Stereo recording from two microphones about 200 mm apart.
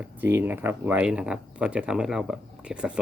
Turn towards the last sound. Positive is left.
turn(degrees=-5)  # may be behind; listen again after turning